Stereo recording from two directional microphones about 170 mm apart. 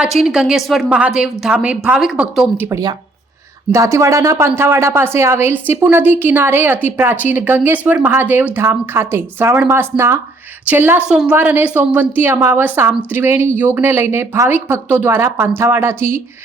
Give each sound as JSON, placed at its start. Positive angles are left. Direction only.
{"t": 0.0, "sound": "a woman's voice", "side_deg": -5}
{"t": 2.6, "sound": "speech", "side_deg": -20}